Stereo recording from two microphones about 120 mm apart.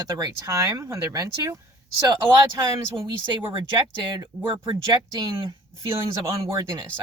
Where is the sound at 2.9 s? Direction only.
40° right (ahead or behind).